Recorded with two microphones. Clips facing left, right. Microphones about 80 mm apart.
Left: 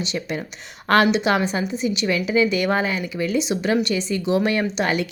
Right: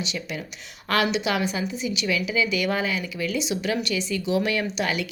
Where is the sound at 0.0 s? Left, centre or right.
Left.